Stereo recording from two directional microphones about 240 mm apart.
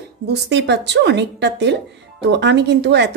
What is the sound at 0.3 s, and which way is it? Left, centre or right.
A woman's voice, right.